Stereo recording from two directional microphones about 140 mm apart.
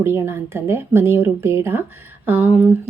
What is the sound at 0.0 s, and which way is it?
A woman's voice, 20° right (ahead or behind).